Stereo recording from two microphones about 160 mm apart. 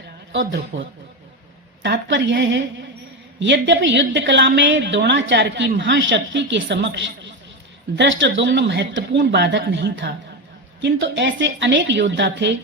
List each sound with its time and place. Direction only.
1.8 s a woman's voice: 90° right